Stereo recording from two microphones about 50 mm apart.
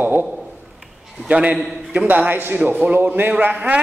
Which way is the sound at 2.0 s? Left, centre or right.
Right.